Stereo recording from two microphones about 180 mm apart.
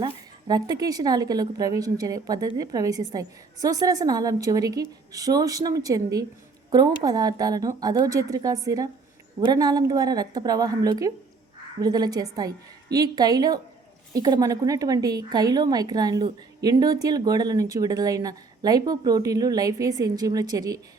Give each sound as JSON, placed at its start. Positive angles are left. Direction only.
{"t": 0.0, "sound": "a woman's voice", "side_deg": -20}